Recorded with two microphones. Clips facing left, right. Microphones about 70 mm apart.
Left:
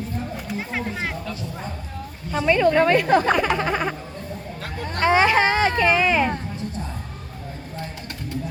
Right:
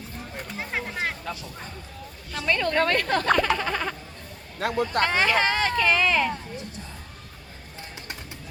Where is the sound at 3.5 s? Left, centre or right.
Centre.